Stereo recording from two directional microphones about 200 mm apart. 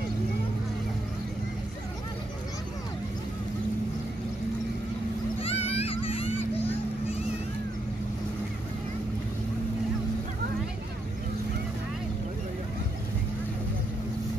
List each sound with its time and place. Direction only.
5.4 s vehicle: 30° left (ahead or behind)